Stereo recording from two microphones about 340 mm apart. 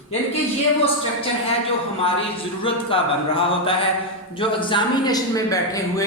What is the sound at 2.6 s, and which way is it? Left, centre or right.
A man's voice, centre.